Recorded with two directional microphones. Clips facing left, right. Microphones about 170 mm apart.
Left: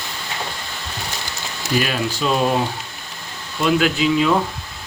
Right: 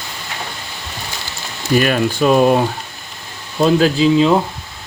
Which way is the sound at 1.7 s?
50° right (ahead or behind).